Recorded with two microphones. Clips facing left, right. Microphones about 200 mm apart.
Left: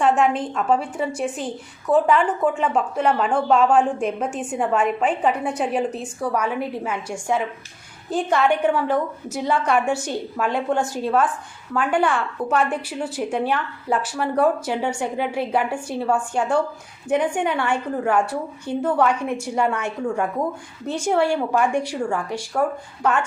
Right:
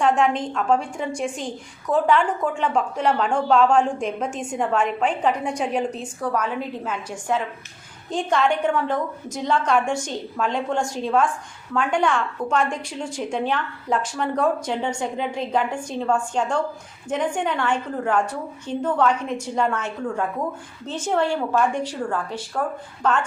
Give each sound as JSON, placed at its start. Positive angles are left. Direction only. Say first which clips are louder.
{"t": 0.0, "sound": "a woman's voice", "louder": "left 1 dB", "side_deg": 5}